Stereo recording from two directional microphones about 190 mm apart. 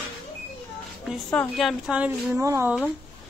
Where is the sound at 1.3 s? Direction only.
Centre (ahead or behind); by 2.7 s 15° right (ahead or behind).